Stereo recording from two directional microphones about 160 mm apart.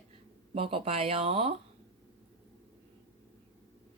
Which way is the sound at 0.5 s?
35° right (ahead or behind).